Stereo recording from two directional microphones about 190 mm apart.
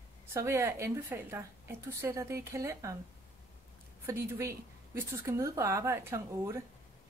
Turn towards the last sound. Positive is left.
turn(degrees=-15)  # may be behind; listen again after turning